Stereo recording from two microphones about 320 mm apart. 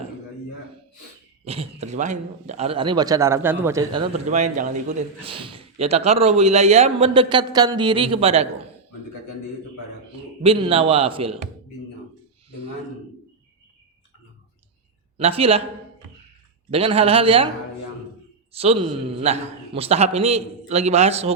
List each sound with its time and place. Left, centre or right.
1.5 s a man's voice: centre
10.4 s a man's voice: centre
15.2 s a man's voice: centre
16.7 s a man's voice: centre
18.5 s a man's voice: centre